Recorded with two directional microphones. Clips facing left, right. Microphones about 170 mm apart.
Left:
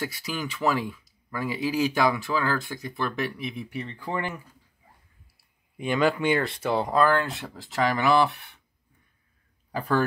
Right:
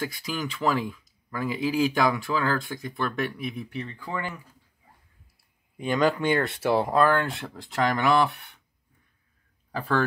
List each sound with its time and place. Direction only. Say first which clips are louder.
0.0 s speech: right 1 dB; 5° left (ahead or behind)
4.0 s speech: left 4 dB; 25° left (ahead or behind)
6.1 s speech: even; 10° left (ahead or behind)
6.4 s speech: right 2 dB; centre (ahead or behind)
9.7 s speech: left 1 dB; 10° left (ahead or behind)